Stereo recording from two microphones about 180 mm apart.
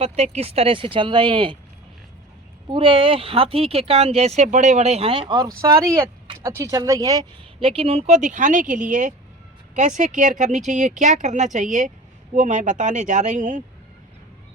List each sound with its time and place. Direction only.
0.0 s speech: 35° right (ahead or behind)
2.6 s speech: 30° right (ahead or behind)
7.7 s speech: 35° right (ahead or behind)